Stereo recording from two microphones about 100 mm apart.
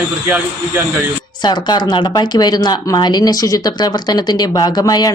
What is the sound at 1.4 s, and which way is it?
A woman's voice, 45° left (ahead or behind).